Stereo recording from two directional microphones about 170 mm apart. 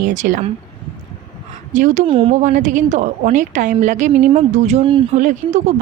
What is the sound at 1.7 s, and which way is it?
Speech, 45° right (ahead or behind).